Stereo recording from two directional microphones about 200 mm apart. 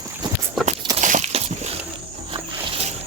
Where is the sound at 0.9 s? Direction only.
35° right (ahead or behind).